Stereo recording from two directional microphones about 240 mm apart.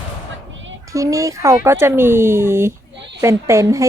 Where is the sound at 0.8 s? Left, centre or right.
Centre.